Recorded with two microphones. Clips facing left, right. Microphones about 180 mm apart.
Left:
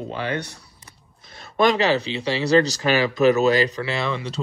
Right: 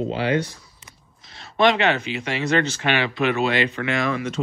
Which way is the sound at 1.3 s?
50° left (ahead or behind).